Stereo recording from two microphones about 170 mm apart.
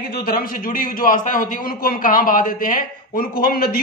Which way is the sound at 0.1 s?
60° left (ahead or behind).